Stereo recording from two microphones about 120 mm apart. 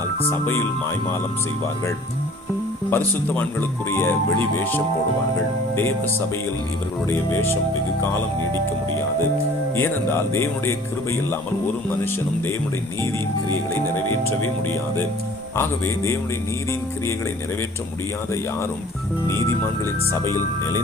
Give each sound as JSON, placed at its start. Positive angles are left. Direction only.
{"t": 0.2, "sound": "speech", "side_deg": 20}
{"t": 2.9, "sound": "speech", "side_deg": 15}
{"t": 9.7, "sound": "speech", "side_deg": 20}
{"t": 15.5, "sound": "speech", "side_deg": 20}
{"t": 19.3, "sound": "speech", "side_deg": 25}